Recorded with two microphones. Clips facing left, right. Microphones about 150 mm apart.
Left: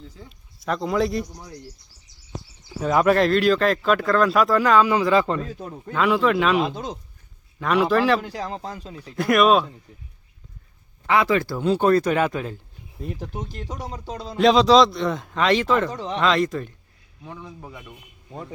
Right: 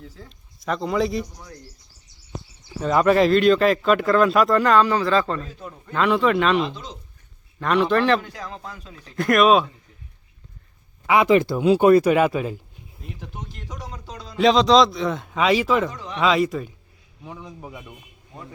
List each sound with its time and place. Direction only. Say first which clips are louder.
0.0 s speech: right 1 dB; centre (ahead or behind)
2.8 s speech: right 1 dB; 5° left (ahead or behind)
4.9 s a man's voice: left 1 dB; 15° left (ahead or behind)
5.9 s speech: even; centre (ahead or behind)
6.6 s speech: left 2 dB; 50° left (ahead or behind)
7.6 s speech: even; 5° left (ahead or behind)
8.2 s speech: left 5 dB; 35° left (ahead or behind)
9.0 s speech: right 1 dB; 5° left (ahead or behind)
11.0 s speech: right 3 dB; 15° right (ahead or behind)
13.1 s speech: left 5 dB; 35° left (ahead or behind)
14.3 s speech: left 1 dB; centre (ahead or behind)
15.9 s speech: left 5 dB; 30° left (ahead or behind)
16.2 s speech: right 2 dB; 5° right (ahead or behind)